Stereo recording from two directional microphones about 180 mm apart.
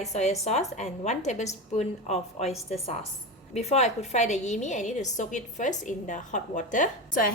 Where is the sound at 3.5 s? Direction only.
40° left (ahead or behind).